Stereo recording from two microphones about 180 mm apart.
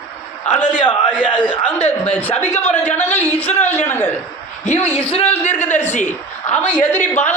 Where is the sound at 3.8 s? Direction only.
10° left (ahead or behind).